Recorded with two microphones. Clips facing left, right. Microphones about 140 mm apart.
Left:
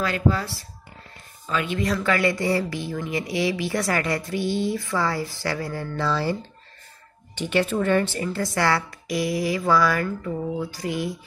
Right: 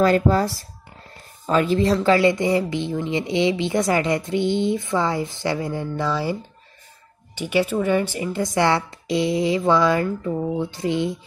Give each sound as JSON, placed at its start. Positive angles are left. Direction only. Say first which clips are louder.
{"t": 0.0, "sound": "speech", "louder": "right 6 dB", "side_deg": -40}
{"t": 7.3, "sound": "speech", "louder": "right 2 dB", "side_deg": -10}